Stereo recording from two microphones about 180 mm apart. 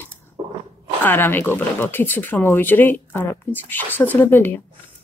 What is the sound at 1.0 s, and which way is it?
Speech, 10° left (ahead or behind).